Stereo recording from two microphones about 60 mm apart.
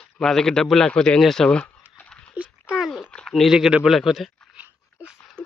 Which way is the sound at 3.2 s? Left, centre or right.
Centre.